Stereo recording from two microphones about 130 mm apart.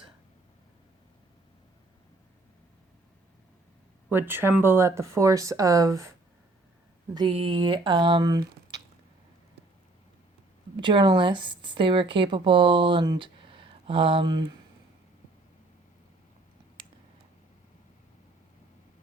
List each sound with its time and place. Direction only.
4.1 s speech: 15° right (ahead or behind)
7.1 s a woman's voice: 35° right (ahead or behind)
10.8 s a woman's voice: 40° right (ahead or behind)